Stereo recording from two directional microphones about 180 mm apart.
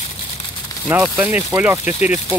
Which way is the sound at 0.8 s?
5° right (ahead or behind).